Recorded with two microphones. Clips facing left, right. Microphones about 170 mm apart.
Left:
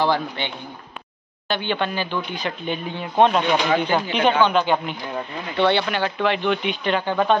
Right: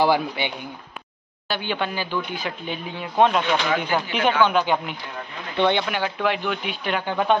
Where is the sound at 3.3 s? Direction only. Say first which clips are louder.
Left 2 dB; 10° left (ahead or behind).